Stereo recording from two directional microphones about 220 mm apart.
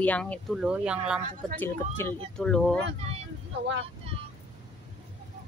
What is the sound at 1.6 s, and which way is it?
Speech, 10° left (ahead or behind).